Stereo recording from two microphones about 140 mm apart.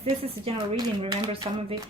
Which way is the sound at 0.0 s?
45° right (ahead or behind).